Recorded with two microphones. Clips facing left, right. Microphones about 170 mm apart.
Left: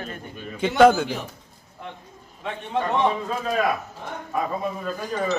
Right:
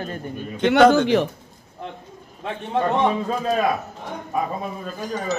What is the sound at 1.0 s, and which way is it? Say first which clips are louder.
Speech: right 11 dB; 75° right (ahead or behind).